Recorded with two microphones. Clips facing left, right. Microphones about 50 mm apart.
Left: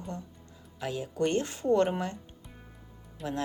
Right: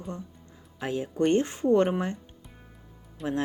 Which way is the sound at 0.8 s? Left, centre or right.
Right.